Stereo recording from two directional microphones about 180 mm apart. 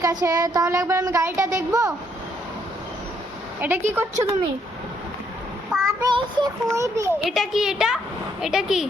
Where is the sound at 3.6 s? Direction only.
10° right (ahead or behind).